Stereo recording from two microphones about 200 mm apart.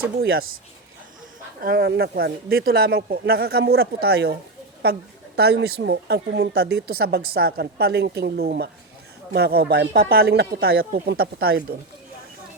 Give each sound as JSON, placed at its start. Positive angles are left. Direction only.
{"t": 0.2, "sound": "speech", "side_deg": -50}
{"t": 1.6, "sound": "speech", "side_deg": -55}